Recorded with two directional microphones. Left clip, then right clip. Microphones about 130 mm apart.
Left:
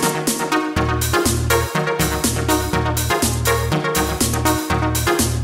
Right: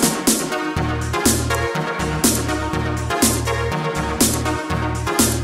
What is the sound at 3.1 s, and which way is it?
Music, centre (ahead or behind).